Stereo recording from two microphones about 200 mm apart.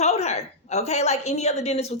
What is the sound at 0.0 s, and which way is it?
Speech, 35° left (ahead or behind).